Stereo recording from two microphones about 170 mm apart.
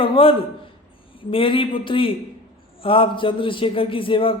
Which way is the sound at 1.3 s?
30° left (ahead or behind).